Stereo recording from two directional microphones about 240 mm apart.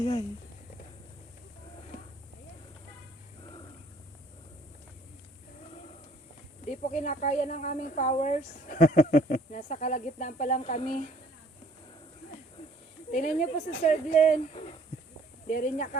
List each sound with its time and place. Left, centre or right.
0.0 s speech: left
6.7 s speech: left
13.1 s speech: left